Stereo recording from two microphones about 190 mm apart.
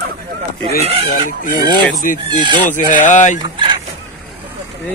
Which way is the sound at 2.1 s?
45° left (ahead or behind).